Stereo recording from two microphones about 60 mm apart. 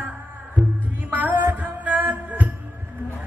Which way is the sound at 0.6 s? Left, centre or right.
Centre.